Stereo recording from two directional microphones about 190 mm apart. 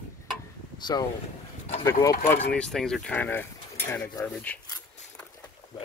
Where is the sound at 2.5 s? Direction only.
5° left (ahead or behind).